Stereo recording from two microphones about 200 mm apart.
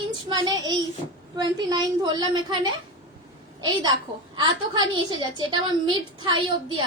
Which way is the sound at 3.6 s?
20° right (ahead or behind).